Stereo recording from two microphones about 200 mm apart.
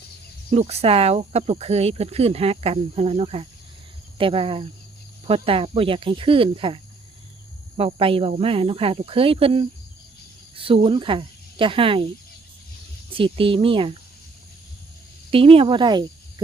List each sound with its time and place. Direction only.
0.5 s speech: 30° right (ahead or behind)
13.1 s speech: 25° right (ahead or behind)
15.3 s speech: 25° right (ahead or behind)